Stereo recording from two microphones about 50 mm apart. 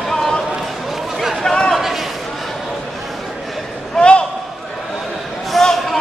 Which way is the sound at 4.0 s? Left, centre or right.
Left.